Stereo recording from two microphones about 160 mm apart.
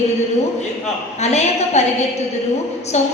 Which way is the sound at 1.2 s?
45° left (ahead or behind).